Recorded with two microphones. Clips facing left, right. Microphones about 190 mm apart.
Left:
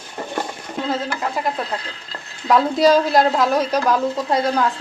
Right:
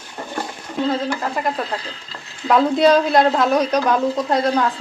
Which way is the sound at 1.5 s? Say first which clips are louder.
Right 1 dB; centre (ahead or behind).